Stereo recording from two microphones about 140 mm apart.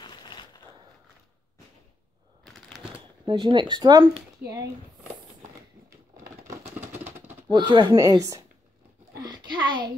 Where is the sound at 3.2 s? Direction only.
35° right (ahead or behind).